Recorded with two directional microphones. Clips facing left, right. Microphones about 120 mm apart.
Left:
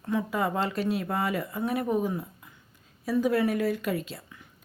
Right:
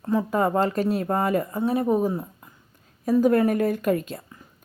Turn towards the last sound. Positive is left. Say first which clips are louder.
# right 4 dB
turn(degrees=-40)  # may be behind; listen again after turning